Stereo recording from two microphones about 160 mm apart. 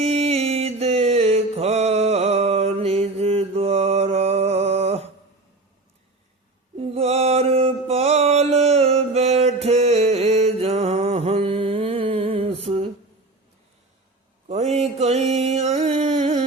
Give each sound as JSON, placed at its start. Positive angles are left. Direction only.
{"t": 0.0, "sound": "mantra", "side_deg": -40}
{"t": 6.7, "sound": "mantra", "side_deg": -40}
{"t": 14.4, "sound": "a sound", "side_deg": -45}